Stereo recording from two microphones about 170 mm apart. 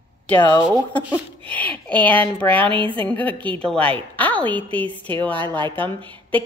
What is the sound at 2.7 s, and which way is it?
Speech, 30° right (ahead or behind).